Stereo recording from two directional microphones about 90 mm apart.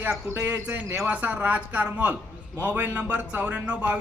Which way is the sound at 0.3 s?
25° right (ahead or behind).